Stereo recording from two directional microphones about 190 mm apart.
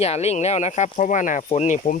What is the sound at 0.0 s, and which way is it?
Speech, 35° left (ahead or behind).